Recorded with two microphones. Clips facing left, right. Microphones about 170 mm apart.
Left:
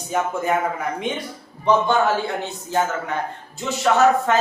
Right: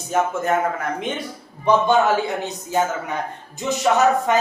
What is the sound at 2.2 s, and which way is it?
Speech, 15° right (ahead or behind).